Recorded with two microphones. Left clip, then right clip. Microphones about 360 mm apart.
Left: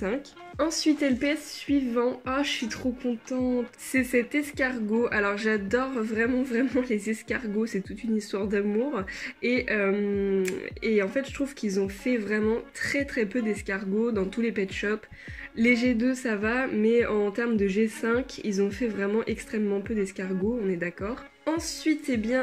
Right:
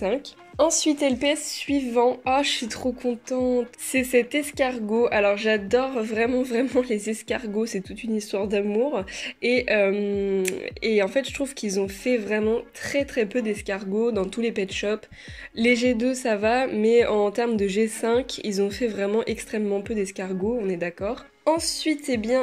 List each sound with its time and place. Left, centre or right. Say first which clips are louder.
0.9 s a woman's voice: right 1 dB; right
1.2 s speech: right 5 dB; centre